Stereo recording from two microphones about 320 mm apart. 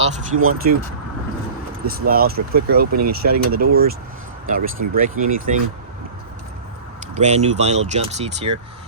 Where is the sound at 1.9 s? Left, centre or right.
Right.